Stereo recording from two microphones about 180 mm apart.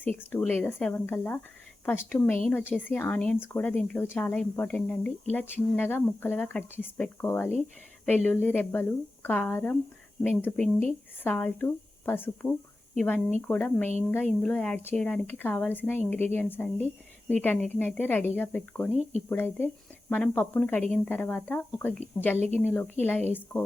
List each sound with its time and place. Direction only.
0.3 s speech: 10° left (ahead or behind)
22.4 s speech: 35° right (ahead or behind)
22.6 s speech: 10° left (ahead or behind)